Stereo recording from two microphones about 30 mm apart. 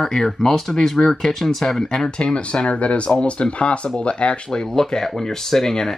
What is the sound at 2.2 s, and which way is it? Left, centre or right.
Speech, left.